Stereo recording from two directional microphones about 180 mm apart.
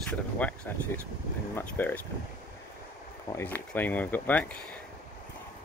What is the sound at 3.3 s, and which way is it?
Speech, 10° left (ahead or behind).